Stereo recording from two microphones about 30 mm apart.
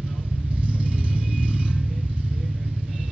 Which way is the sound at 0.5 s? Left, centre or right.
Right.